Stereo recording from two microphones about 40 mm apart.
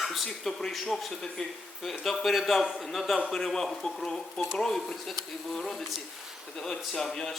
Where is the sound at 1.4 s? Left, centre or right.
Centre.